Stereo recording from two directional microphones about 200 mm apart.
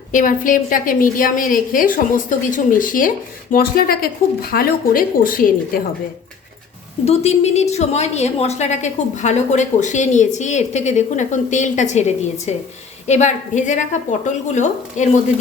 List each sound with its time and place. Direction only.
0.1 s a woman's voice: 40° left (ahead or behind)
7.0 s a woman's voice: 30° left (ahead or behind)